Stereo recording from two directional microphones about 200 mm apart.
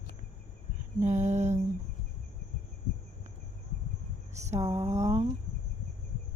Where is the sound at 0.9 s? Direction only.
35° right (ahead or behind).